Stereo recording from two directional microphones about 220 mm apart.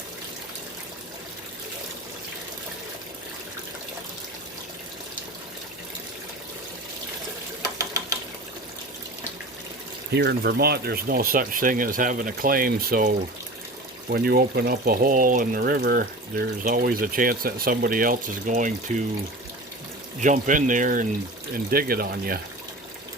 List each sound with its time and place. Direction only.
7.6 s engine knocking: 15° right (ahead or behind)
10.1 s speech: 45° right (ahead or behind)
20.2 s speech: 35° right (ahead or behind)